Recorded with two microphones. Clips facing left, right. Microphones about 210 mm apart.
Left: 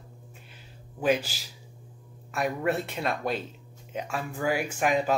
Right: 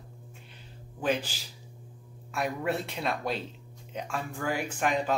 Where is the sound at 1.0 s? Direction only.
10° left (ahead or behind).